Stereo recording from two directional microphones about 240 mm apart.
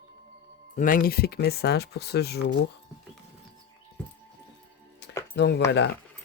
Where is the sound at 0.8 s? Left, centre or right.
Left.